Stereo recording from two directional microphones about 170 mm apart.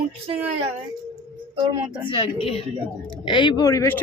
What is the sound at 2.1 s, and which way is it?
A woman's voice, 30° left (ahead or behind).